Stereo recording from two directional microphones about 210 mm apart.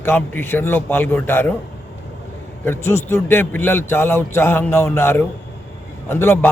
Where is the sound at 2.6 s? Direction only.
10° left (ahead or behind).